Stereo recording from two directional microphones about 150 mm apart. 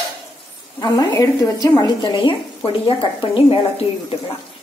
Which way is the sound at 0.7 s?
25° left (ahead or behind).